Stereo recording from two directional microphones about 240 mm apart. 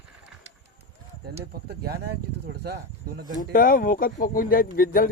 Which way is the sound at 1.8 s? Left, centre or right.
Right.